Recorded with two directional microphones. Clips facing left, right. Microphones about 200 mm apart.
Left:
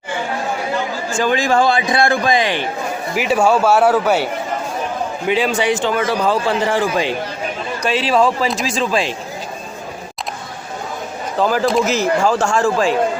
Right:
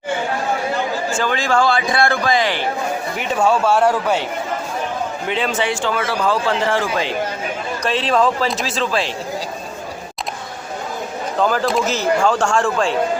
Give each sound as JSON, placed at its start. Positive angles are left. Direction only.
{"t": 1.1, "sound": "a man's voice", "side_deg": 15}
{"t": 5.3, "sound": "a man's voice", "side_deg": 10}
{"t": 11.3, "sound": "speech", "side_deg": 5}